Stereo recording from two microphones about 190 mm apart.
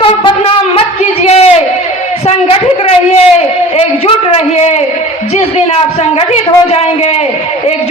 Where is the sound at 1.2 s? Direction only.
35° left (ahead or behind).